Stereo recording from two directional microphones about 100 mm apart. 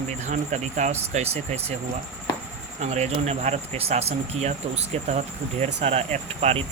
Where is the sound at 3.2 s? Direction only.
90° right.